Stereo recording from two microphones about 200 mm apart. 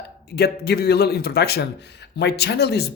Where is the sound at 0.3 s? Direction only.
55° left (ahead or behind).